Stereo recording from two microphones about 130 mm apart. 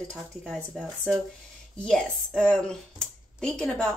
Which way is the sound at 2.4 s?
5° left (ahead or behind).